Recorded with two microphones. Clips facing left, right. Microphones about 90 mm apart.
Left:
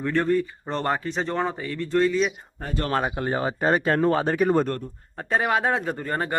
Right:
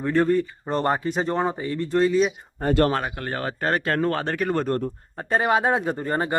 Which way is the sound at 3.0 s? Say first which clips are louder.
Left 3 dB; 15° left (ahead or behind).